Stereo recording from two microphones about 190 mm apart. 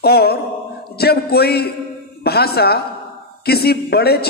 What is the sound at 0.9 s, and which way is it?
A man's voice, 55° left (ahead or behind).